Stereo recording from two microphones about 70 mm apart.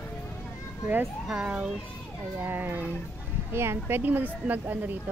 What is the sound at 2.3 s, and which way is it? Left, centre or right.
A woman's voice, right.